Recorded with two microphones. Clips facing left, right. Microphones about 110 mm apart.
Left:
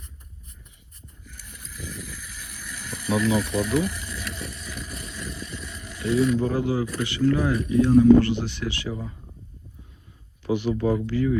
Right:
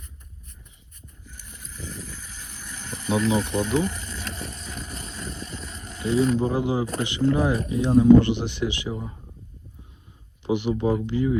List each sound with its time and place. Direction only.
1.4 s a sound: 25° right (ahead or behind)
6.8 s speech: 30° right (ahead or behind)
10.4 s speech: 20° right (ahead or behind)